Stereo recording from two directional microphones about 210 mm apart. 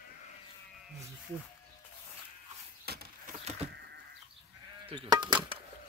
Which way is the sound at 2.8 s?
50° right (ahead or behind).